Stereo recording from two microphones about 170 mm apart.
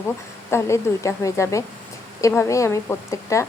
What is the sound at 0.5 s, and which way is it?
Speech, 15° left (ahead or behind).